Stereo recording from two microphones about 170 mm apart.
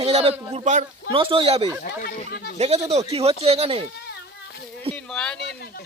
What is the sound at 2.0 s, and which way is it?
Speech, 70° left (ahead or behind).